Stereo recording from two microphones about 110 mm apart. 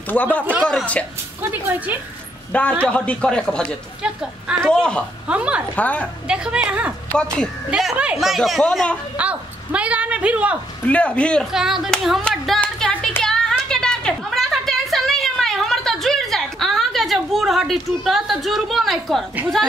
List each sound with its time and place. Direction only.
0.1 s speech: 15° left (ahead or behind)
1.4 s a woman's voice: 15° right (ahead or behind)
2.8 s speech: 10° left (ahead or behind)
4.0 s a woman's voice: 5° right (ahead or behind)
4.6 s speech: 5° left (ahead or behind)
5.3 s a woman's voice: 10° right (ahead or behind)
5.8 s speech: 15° left (ahead or behind)
6.2 s a woman's voice: 10° right (ahead or behind)
9.1 s speech: 10° right (ahead or behind)
10.9 s speech: 10° left (ahead or behind)
11.5 s speech: 5° right (ahead or behind)
12.3 s a sound: 10° left (ahead or behind)